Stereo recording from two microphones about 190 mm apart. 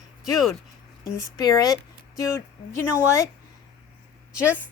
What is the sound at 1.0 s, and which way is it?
Speech, 20° left (ahead or behind).